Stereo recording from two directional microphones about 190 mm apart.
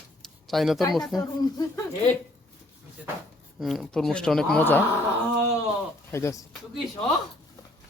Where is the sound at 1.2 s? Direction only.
20° left (ahead or behind).